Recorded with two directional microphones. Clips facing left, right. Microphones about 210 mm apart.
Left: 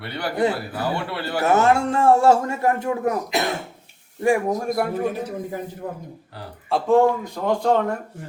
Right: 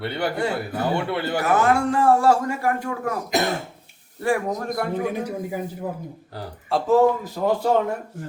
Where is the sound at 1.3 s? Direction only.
25° left (ahead or behind).